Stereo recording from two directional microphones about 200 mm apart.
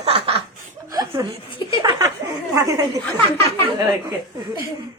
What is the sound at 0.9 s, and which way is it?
Chuckle, 20° right (ahead or behind).